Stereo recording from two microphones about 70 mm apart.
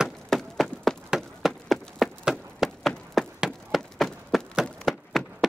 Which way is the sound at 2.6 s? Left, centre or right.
Centre.